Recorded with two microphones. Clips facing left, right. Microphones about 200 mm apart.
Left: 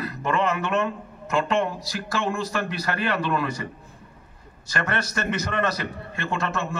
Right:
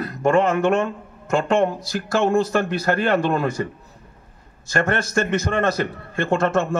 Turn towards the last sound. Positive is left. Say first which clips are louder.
# right 8 dB
turn(degrees=-50)  # may be behind; listen again after turning